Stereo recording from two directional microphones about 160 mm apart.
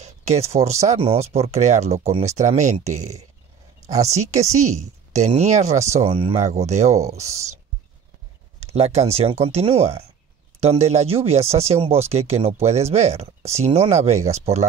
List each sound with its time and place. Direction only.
0.0 s a sound: 45° right (ahead or behind)
0.6 s speech: 45° right (ahead or behind)
8.7 s speech: 40° right (ahead or behind)